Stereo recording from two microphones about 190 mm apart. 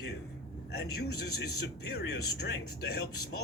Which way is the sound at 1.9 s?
60° left (ahead or behind).